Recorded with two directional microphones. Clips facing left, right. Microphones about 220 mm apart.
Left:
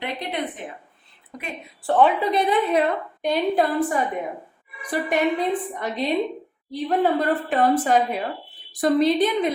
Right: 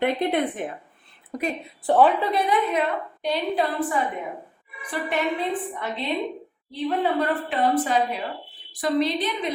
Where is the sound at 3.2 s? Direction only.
45° left (ahead or behind).